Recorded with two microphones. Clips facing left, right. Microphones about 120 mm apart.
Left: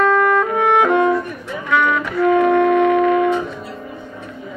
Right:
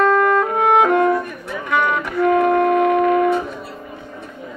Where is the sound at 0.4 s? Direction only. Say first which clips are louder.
Even; 45° right (ahead or behind).